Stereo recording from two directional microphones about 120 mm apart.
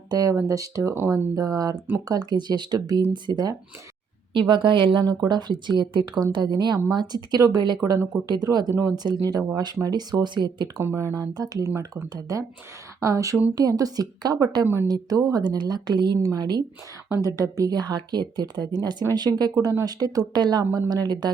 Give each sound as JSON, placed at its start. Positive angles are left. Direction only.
{"t": 0.1, "sound": "a woman's voice", "side_deg": -30}
{"t": 10.8, "sound": "speech", "side_deg": -25}
{"t": 14.8, "sound": "speech", "side_deg": -35}